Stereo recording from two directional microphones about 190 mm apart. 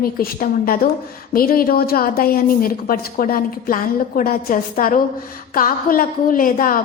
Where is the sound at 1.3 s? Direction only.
50° left (ahead or behind).